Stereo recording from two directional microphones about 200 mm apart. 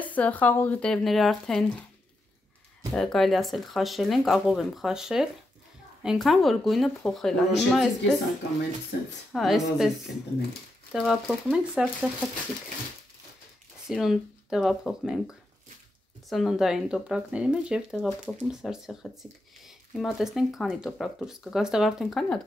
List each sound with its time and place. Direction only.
0.0 s speech: 5° left (ahead or behind)
2.9 s speech: centre (ahead or behind)
8.9 s speech: 45° left (ahead or behind)
9.3 s speech: centre (ahead or behind)
10.9 s speech: centre (ahead or behind)
13.8 s speech: centre (ahead or behind)